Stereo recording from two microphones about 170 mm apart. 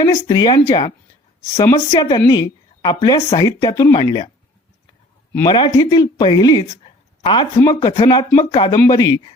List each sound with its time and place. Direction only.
0.0 s a woman's voice: 25° left (ahead or behind)
5.5 s a woman's voice: 25° left (ahead or behind)